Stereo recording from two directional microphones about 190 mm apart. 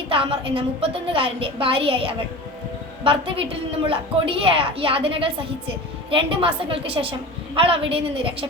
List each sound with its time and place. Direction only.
0.1 s a woman's voice: 30° right (ahead or behind)